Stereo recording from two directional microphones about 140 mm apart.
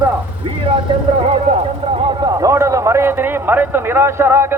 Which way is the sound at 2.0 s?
30° right (ahead or behind).